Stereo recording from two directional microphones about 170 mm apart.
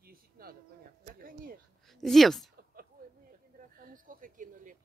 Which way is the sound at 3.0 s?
60° right (ahead or behind).